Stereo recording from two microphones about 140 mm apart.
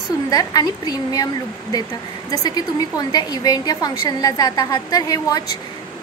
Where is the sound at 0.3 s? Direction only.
25° left (ahead or behind).